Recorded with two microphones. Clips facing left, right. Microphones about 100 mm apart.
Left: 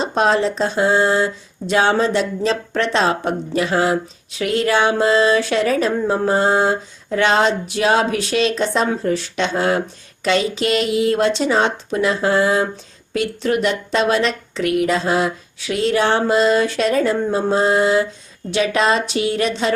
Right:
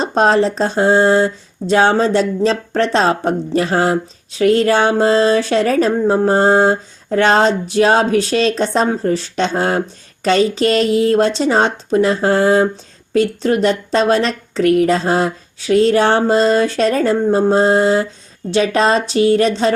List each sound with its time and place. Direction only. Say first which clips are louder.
0.0 s speech: right 3 dB; 40° right (ahead or behind)